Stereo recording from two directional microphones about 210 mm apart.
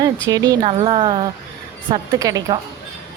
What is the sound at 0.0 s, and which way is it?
A woman's voice, 15° right (ahead or behind).